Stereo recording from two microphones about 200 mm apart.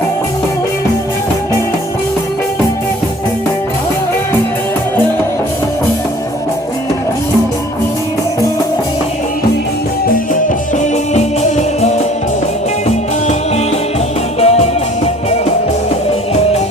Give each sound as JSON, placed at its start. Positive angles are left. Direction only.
{"t": 11.1, "sound": "music", "side_deg": 35}
{"t": 14.3, "sound": "music", "side_deg": 30}